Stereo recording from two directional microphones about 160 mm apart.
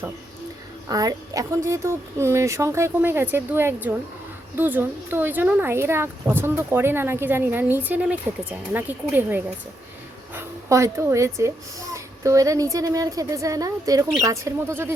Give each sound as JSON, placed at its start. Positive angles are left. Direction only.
{"t": 0.9, "sound": "a woman's voice", "side_deg": -20}